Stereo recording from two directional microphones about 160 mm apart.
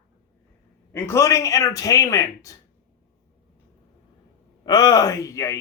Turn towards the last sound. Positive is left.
turn(degrees=20)  # may be behind; listen again after turning